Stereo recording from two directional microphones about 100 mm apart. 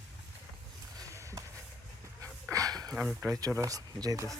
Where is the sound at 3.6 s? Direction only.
40° right (ahead or behind).